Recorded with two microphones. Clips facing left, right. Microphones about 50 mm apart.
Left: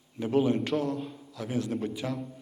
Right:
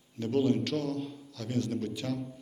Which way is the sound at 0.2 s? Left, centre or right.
Centre.